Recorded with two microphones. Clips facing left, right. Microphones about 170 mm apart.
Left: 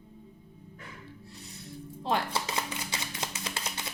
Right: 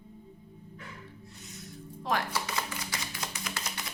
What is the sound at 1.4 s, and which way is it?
Music, 30° left (ahead or behind).